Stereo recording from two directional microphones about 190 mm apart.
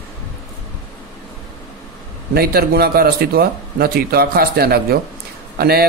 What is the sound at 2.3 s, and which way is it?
A man's voice, 55° right (ahead or behind).